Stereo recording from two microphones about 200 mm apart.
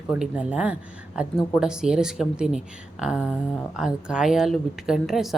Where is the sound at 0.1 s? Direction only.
5° right (ahead or behind).